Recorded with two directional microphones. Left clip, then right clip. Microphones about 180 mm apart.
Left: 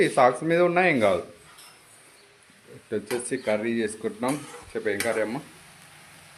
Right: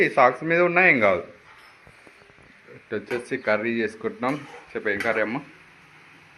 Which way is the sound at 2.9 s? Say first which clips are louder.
Right 1 dB; 15° left (ahead or behind).